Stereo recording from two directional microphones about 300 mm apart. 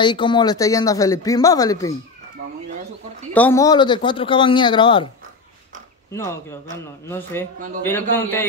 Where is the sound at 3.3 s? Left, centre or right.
Centre.